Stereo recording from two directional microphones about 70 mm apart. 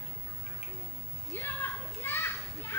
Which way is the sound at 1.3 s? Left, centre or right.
Left.